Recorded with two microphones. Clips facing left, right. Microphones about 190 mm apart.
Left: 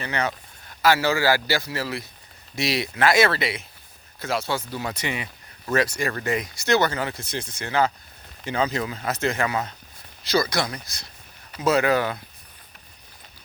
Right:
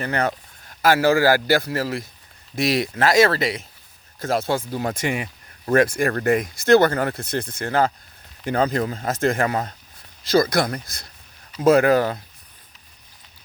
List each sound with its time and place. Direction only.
0.0 s speech: 50° right (ahead or behind)